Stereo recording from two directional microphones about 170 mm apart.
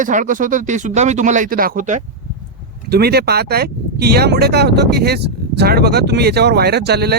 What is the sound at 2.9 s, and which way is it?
Speech, 70° right (ahead or behind).